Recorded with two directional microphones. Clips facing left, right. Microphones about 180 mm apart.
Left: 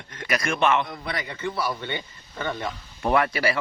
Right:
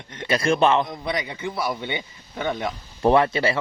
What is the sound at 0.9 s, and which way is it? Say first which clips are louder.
A man's voice: right 4 dB; 20° right (ahead or behind).